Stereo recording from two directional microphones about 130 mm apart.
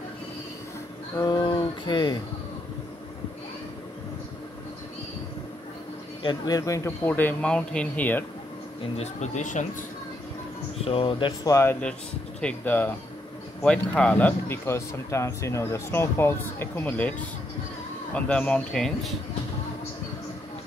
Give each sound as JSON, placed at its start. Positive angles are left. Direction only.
{"t": 1.1, "sound": "speech", "side_deg": 30}
{"t": 6.2, "sound": "a man's voice", "side_deg": 30}
{"t": 8.9, "sound": "speech", "side_deg": 60}
{"t": 10.8, "sound": "speech", "side_deg": 45}
{"t": 11.4, "sound": "speech", "side_deg": 25}
{"t": 12.4, "sound": "a man's voice", "side_deg": 10}
{"t": 18.1, "sound": "a man's voice", "side_deg": 10}